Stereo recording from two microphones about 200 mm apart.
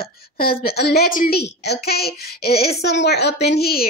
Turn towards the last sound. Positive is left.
turn(degrees=50)  # may be behind; listen again after turning